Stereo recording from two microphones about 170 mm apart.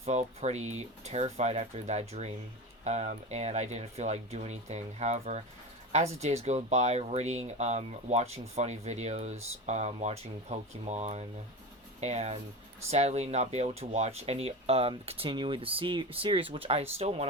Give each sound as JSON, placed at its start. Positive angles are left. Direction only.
{"t": 0.0, "sound": "speech", "side_deg": -40}